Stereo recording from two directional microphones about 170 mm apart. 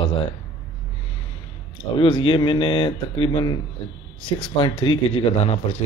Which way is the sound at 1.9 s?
30° left (ahead or behind).